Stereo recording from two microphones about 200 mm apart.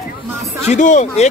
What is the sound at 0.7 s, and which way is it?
Speech, 35° left (ahead or behind).